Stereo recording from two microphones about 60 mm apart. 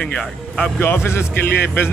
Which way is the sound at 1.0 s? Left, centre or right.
Left.